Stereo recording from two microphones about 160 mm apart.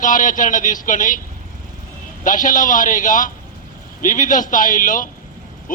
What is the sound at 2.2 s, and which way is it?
A man's voice, 55° left (ahead or behind).